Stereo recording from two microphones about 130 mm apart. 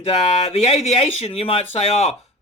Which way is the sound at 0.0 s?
50° left (ahead or behind).